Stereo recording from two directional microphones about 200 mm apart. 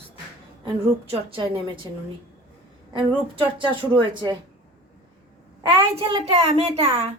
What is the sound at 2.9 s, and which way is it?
Speech, 25° right (ahead or behind).